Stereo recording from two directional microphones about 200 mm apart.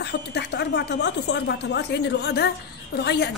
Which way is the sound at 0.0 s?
55° left (ahead or behind).